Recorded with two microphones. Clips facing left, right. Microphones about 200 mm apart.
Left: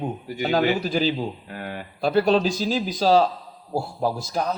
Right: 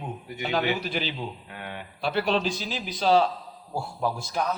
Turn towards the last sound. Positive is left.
turn(degrees=35)  # may be behind; listen again after turning